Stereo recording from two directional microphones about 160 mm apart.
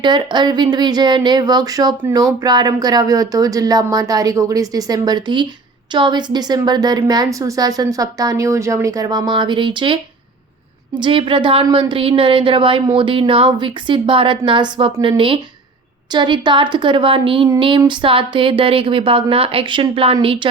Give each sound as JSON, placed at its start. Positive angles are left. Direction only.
{"t": 0.0, "sound": "speech", "side_deg": -30}
{"t": 11.0, "sound": "a woman's voice", "side_deg": -35}